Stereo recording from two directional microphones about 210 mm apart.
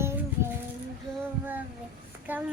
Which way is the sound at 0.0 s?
10° right (ahead or behind).